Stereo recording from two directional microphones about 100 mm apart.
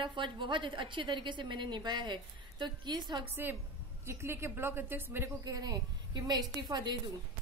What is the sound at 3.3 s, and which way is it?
A woman's voice, 20° right (ahead or behind).